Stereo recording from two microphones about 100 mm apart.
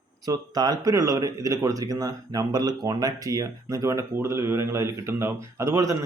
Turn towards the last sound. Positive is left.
turn(degrees=-30)  # may be behind; listen again after turning